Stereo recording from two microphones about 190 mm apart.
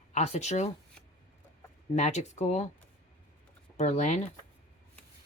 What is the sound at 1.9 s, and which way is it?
Speech, 35° left (ahead or behind).